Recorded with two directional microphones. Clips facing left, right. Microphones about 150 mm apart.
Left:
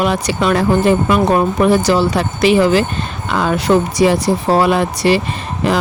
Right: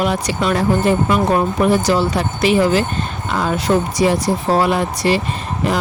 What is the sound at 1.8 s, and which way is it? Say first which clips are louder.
Speech: left 2 dB; 90° left.